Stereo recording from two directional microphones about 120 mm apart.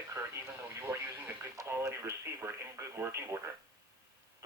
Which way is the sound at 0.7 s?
20° right (ahead or behind).